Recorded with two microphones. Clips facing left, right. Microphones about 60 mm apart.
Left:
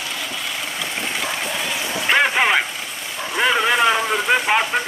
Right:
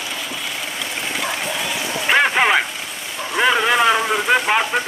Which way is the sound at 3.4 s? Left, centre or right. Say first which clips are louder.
Right 1 dB; centre.